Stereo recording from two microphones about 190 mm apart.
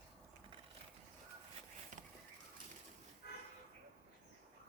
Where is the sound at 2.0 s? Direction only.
40° right (ahead or behind).